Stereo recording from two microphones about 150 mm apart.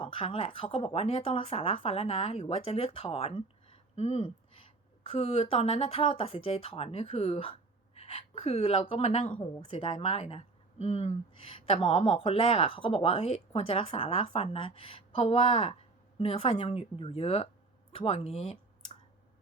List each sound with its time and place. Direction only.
0.0 s speech: 40° left (ahead or behind)
9.4 s speech: 30° left (ahead or behind)